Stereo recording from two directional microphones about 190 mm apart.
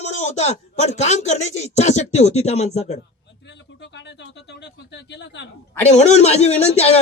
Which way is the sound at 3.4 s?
65° left (ahead or behind).